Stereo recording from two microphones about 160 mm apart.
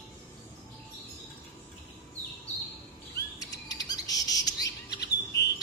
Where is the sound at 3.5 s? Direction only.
25° left (ahead or behind).